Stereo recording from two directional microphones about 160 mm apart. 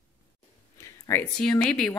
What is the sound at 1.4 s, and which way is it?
Speech, 5° left (ahead or behind).